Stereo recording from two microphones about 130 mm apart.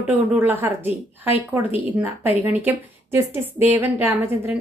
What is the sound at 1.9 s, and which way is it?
A woman's voice, 10° right (ahead or behind).